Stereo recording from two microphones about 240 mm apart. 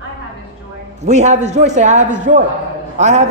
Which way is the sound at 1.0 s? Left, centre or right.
Right.